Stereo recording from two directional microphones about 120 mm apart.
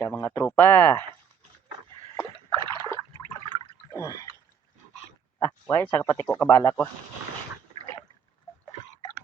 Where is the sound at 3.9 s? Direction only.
25° left (ahead or behind).